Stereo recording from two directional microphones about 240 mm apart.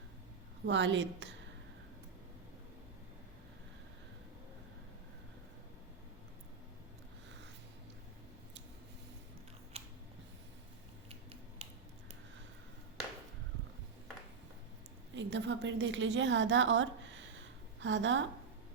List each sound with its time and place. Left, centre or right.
0.6 s a woman's voice: right
9.7 s scissors: right
11.1 s a sound: right
15.1 s a woman's voice: right